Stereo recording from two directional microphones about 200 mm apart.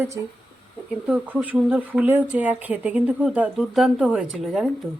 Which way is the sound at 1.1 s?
5° right (ahead or behind).